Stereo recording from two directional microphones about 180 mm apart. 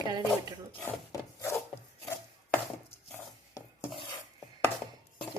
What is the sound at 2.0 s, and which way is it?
Chopping, 10° left (ahead or behind).